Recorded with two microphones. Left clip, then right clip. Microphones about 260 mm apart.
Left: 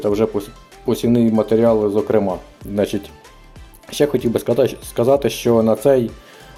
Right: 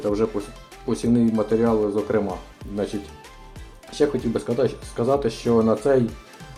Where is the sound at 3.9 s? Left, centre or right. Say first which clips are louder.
Left 5 dB; left.